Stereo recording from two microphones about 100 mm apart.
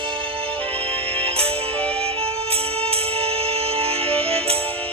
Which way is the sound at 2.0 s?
90° right.